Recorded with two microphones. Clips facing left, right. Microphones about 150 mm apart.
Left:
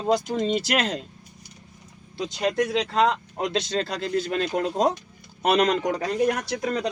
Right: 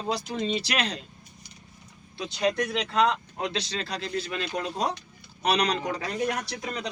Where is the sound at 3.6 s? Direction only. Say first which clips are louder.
Left 6 dB; 50° left (ahead or behind).